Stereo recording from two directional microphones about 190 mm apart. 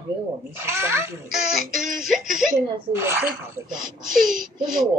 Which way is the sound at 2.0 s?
Centre (ahead or behind).